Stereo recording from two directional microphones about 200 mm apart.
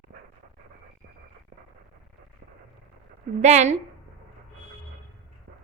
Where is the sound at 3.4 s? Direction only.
35° right (ahead or behind).